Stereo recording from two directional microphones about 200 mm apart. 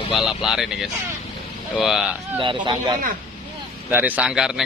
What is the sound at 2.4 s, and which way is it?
Speech, 25° right (ahead or behind).